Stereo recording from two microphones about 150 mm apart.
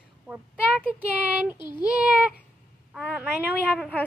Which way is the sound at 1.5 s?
30° left (ahead or behind).